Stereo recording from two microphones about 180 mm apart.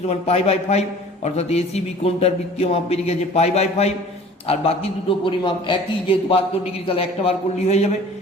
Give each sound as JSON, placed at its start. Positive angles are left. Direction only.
{"t": 0.1, "sound": "a man's voice", "side_deg": 35}